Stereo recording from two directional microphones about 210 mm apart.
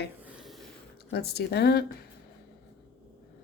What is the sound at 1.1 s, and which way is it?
Speech, 50° left (ahead or behind).